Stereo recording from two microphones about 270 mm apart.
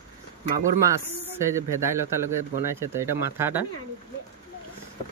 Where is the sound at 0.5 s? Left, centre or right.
Centre.